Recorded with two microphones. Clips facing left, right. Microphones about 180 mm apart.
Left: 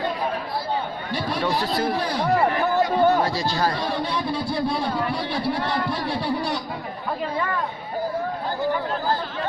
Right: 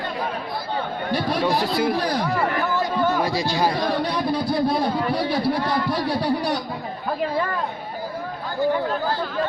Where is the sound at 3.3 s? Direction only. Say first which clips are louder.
Right 2 dB; 15° right (ahead or behind).